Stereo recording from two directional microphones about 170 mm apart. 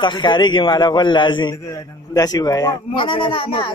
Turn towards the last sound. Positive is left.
turn(degrees=30)  # may be behind; listen again after turning